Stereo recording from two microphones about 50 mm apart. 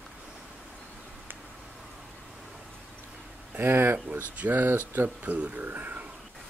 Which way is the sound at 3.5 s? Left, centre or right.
Right.